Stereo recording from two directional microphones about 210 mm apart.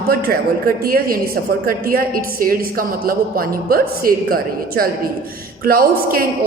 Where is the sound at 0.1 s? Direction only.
45° right (ahead or behind).